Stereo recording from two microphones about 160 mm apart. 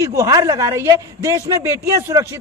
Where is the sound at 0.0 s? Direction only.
20° right (ahead or behind).